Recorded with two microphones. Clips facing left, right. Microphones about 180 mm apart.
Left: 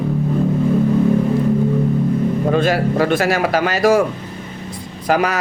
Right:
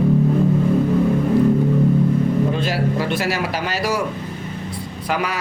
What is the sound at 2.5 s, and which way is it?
A man's voice, 50° left (ahead or behind).